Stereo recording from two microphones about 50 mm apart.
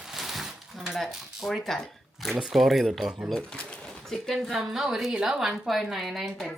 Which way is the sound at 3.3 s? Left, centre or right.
Centre.